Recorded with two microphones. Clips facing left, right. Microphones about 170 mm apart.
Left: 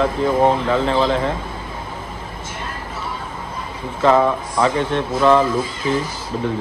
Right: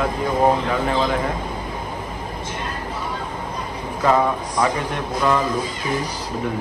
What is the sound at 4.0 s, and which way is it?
A man's voice, 25° left (ahead or behind).